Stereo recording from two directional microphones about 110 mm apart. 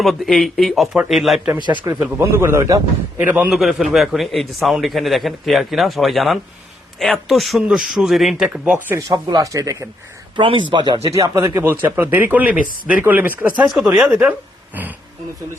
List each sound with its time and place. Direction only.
0.0 s a man's voice: centre (ahead or behind)
1.5 s speech: 45° right (ahead or behind)
1.8 s speech: 20° right (ahead or behind)
3.2 s a man's voice: 15° right (ahead or behind)
3.5 s a man's voice: 5° right (ahead or behind)
8.5 s a man's voice: 15° right (ahead or behind)
9.0 s speech: 35° right (ahead or behind)
10.3 s speech: 50° right (ahead or behind)
11.1 s a man's voice: 25° right (ahead or behind); by 14.2 s 5° right (ahead or behind)
14.8 s a man's voice: 15° right (ahead or behind)